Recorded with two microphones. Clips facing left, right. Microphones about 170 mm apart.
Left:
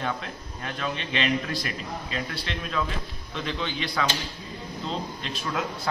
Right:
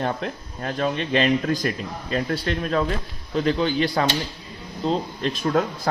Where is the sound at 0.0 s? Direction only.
40° right (ahead or behind).